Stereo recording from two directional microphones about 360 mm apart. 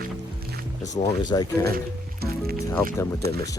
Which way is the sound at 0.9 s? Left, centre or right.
Centre.